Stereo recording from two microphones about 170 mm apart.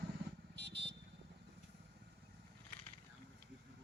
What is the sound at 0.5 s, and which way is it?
Vehicle, 80° right.